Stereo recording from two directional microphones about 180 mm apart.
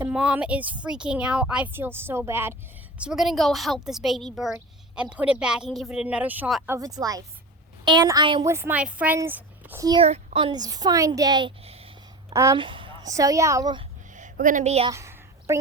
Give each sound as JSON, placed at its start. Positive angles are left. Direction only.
{"t": 0.0, "sound": "speech", "side_deg": -5}
{"t": 3.0, "sound": "speech", "side_deg": -5}
{"t": 6.7, "sound": "a woman's voice", "side_deg": -20}
{"t": 8.4, "sound": "speech", "side_deg": -15}
{"t": 10.0, "sound": "a woman's voice", "side_deg": -35}
{"t": 12.3, "sound": "speech", "side_deg": -15}
{"t": 12.6, "sound": "a woman's voice", "side_deg": -30}
{"t": 14.1, "sound": "a sound", "side_deg": -45}
{"t": 14.8, "sound": "a sound", "side_deg": -15}